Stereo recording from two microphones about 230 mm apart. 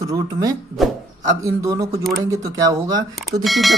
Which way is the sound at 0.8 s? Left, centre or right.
Centre.